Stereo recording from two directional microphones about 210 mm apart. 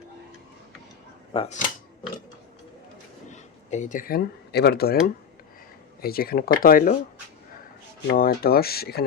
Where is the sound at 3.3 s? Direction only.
35° left (ahead or behind).